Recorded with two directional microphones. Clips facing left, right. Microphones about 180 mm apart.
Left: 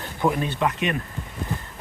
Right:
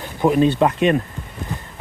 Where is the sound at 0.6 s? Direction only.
35° right (ahead or behind).